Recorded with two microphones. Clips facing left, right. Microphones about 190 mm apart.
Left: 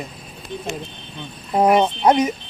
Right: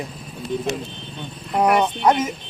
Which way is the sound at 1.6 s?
20° left (ahead or behind).